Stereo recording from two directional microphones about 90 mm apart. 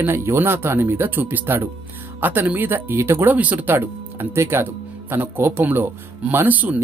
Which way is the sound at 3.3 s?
15° right (ahead or behind).